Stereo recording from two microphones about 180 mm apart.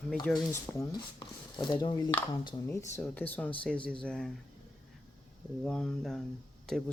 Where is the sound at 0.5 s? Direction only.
25° left (ahead or behind).